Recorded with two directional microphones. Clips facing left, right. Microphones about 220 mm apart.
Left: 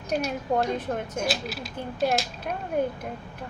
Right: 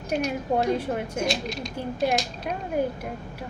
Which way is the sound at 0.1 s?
10° right (ahead or behind).